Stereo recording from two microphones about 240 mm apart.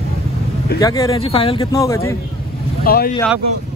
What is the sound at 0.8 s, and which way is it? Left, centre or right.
Speech, centre.